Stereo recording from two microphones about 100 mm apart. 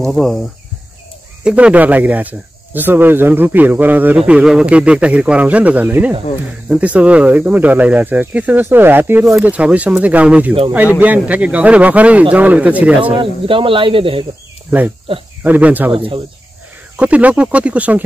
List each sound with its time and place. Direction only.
0.0 s speech: centre (ahead or behind)
1.4 s speech: 10° right (ahead or behind)
4.2 s speech: 5° right (ahead or behind)
13.2 s speech: 60° right (ahead or behind)
15.4 s speech: 15° right (ahead or behind)
15.9 s speech: 60° right (ahead or behind)
16.9 s speech: 15° right (ahead or behind)